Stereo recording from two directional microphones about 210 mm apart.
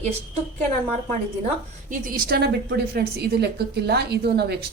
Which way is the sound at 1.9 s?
40° right (ahead or behind).